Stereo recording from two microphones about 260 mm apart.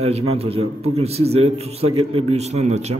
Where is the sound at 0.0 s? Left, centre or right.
Right.